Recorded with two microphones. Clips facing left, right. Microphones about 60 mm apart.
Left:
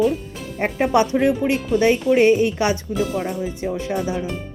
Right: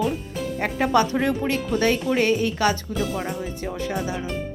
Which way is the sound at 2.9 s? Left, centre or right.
Centre.